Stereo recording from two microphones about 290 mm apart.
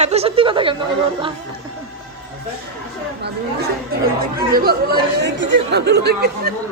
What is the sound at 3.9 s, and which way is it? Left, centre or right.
Speech, right.